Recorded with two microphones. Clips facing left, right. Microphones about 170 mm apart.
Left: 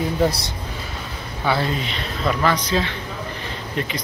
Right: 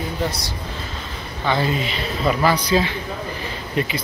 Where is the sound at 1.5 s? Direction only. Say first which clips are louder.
Right 1 dB; centre (ahead or behind).